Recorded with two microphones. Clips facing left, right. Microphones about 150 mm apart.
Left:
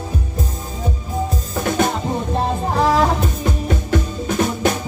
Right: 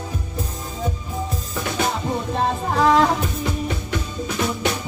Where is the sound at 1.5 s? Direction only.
45° left (ahead or behind).